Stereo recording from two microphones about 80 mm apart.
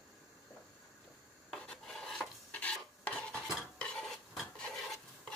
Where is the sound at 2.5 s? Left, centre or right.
Centre.